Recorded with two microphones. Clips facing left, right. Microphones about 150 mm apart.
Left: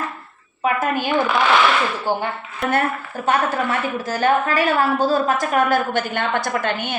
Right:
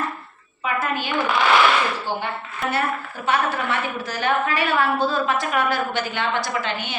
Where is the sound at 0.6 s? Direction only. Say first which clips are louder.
Left 4 dB; 45° left (ahead or behind).